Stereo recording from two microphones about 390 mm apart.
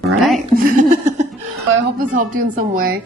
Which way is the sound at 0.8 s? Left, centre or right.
Centre.